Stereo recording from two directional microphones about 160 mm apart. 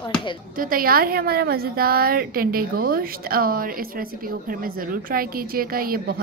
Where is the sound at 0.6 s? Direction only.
65° right (ahead or behind).